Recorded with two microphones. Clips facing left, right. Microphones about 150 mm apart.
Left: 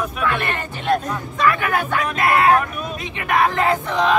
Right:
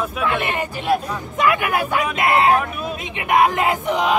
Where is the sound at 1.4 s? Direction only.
15° right (ahead or behind).